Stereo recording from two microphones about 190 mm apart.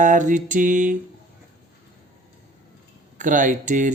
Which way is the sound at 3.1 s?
40° right (ahead or behind).